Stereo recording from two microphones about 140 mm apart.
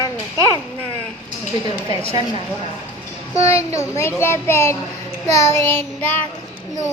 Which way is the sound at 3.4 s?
20° left (ahead or behind).